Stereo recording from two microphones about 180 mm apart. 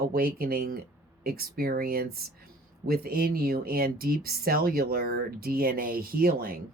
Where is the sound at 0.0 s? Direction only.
55° right (ahead or behind).